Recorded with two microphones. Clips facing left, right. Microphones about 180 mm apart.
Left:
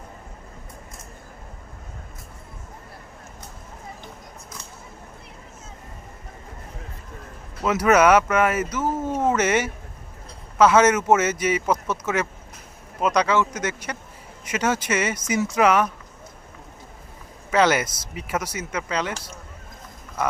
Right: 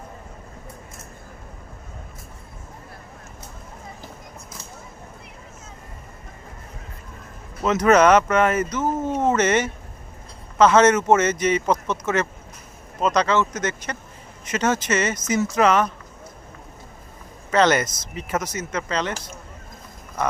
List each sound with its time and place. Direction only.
7.6 s speech: 10° left (ahead or behind)
17.5 s speech: 10° left (ahead or behind)